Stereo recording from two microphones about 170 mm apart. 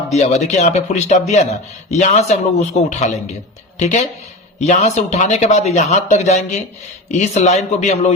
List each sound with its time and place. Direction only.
0.1 s speech: 40° left (ahead or behind)